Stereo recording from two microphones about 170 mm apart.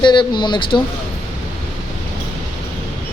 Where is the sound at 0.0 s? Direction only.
25° left (ahead or behind).